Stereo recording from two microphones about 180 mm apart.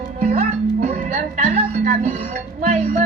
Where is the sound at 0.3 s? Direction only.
40° right (ahead or behind).